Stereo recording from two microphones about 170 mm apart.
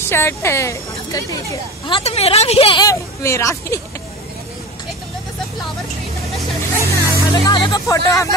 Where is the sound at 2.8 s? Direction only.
15° left (ahead or behind).